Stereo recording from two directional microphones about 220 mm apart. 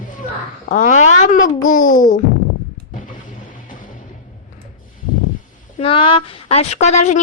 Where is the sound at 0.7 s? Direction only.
35° left (ahead or behind).